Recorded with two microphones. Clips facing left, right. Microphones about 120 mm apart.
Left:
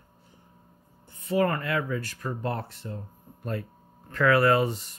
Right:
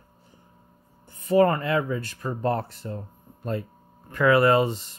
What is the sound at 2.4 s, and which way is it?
Speech, 40° right (ahead or behind).